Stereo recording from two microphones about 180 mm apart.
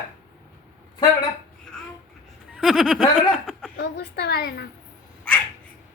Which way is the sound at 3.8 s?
65° left (ahead or behind).